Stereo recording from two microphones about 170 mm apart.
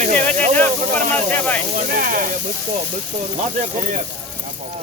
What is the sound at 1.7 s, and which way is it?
Speech, 55° right (ahead or behind).